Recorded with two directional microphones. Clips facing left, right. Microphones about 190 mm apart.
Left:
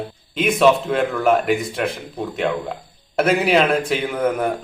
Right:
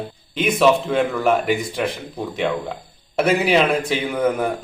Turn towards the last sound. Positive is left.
turn(degrees=0)  # may be behind; listen again after turning